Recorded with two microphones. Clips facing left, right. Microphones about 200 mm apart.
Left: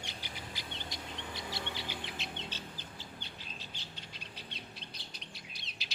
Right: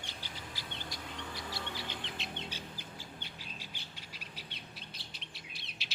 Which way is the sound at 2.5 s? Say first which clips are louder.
Even; 10° right (ahead or behind).